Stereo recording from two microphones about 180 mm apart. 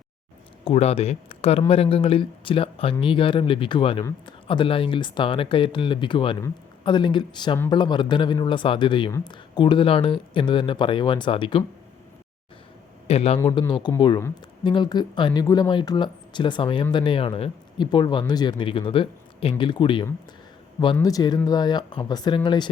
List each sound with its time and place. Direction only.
0.6 s speech: 35° left (ahead or behind)
13.1 s a man's voice: 35° left (ahead or behind)